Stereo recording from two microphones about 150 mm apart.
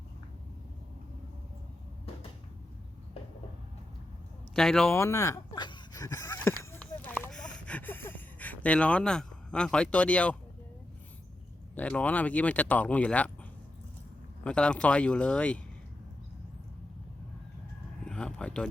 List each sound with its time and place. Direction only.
4.5 s speech: centre (ahead or behind)
4.9 s speech: 15° left (ahead or behind)
5.5 s a sound: 30° left (ahead or behind); by 10.3 s 10° left (ahead or behind)
11.7 s speech: 10° left (ahead or behind)
14.4 s speech: 5° left (ahead or behind)
18.0 s a sound: 5° left (ahead or behind)